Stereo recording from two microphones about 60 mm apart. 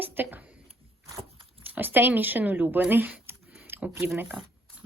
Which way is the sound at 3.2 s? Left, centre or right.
Right.